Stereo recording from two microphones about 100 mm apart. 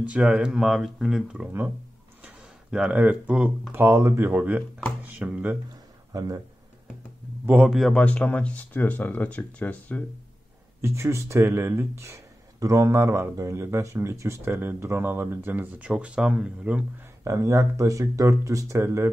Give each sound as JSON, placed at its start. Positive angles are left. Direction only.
{"t": 0.0, "sound": "speech", "side_deg": -10}
{"t": 2.2, "sound": "a sound", "side_deg": -10}
{"t": 3.7, "sound": "speech", "side_deg": -25}
{"t": 6.1, "sound": "speech", "side_deg": -35}
{"t": 7.4, "sound": "speech", "side_deg": -10}
{"t": 7.8, "sound": "speech", "side_deg": 10}
{"t": 10.8, "sound": "speech", "side_deg": -25}
{"t": 17.2, "sound": "speech", "side_deg": -30}